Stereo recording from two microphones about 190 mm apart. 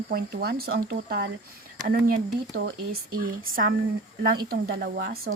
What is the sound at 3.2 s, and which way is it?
Speech, 50° right (ahead or behind).